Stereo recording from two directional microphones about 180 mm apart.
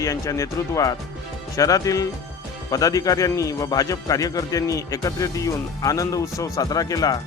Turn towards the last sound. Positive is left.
turn(degrees=20)  # may be behind; listen again after turning